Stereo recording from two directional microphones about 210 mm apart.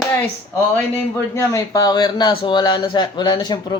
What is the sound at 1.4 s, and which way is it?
A man's voice, 15° left (ahead or behind).